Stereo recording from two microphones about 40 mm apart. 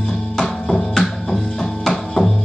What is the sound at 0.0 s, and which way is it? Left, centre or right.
Music, centre.